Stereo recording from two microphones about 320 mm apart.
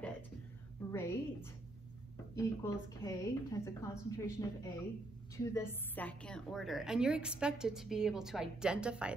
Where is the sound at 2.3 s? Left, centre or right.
Centre.